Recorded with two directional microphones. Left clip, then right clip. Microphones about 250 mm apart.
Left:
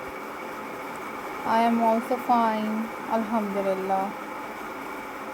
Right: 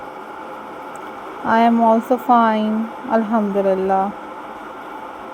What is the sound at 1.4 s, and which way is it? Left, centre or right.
Speech, right.